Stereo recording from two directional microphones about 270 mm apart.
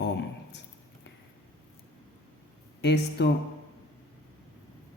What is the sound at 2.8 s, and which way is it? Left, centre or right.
Speech, left.